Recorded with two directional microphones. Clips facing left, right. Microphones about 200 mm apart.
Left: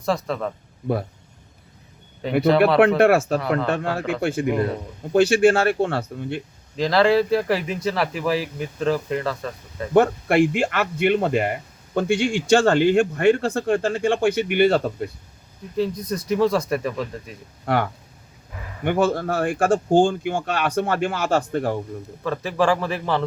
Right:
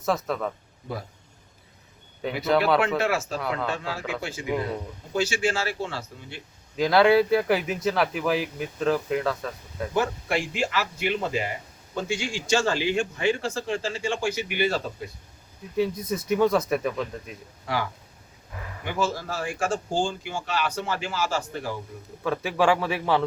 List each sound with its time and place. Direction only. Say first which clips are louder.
0.0 s speech: left 2 dB; centre (ahead or behind)
2.5 s speech: left 4 dB; centre (ahead or behind)
3.0 s speech: left 9 dB; 55° left (ahead or behind)
6.7 s speech: left 1 dB; 5° right (ahead or behind)
9.9 s speech: left 9 dB; 60° left (ahead or behind)
15.7 s speech: left 2 dB; 5° right (ahead or behind)
17.7 s speech: left 7 dB; 60° left (ahead or behind)
18.9 s speech: left 8 dB; 60° left (ahead or behind)
22.2 s a man's voice: left 2 dB; 5° right (ahead or behind)